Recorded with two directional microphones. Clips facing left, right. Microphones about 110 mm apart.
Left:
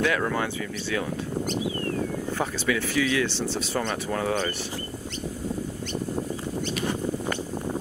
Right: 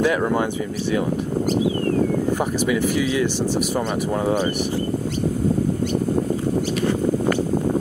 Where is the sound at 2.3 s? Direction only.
15° right (ahead or behind).